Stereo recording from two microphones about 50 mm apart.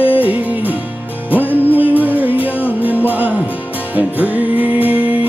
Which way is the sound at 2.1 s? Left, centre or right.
Right.